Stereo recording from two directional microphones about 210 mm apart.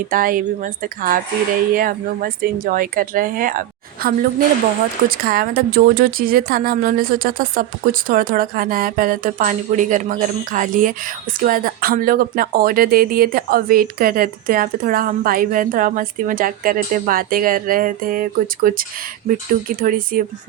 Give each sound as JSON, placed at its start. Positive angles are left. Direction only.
{"t": 0.1, "sound": "speech", "side_deg": -40}